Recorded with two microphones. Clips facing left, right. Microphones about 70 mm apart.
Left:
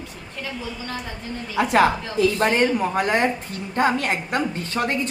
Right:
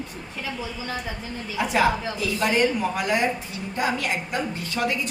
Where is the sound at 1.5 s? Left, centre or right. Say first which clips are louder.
Left 4 dB; left.